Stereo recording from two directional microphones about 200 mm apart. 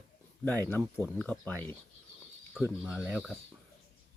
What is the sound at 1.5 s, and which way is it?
Speech, 10° left (ahead or behind).